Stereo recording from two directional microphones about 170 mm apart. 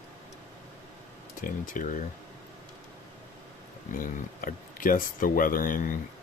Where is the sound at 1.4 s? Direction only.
50° left (ahead or behind).